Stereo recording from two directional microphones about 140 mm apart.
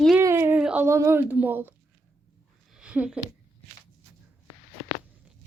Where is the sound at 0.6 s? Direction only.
10° right (ahead or behind).